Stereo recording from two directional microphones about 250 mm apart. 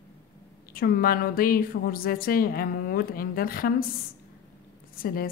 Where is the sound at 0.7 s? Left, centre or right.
Left.